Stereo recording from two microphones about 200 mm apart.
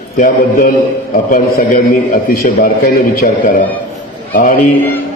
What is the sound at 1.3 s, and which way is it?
A man's voice, 45° left (ahead or behind).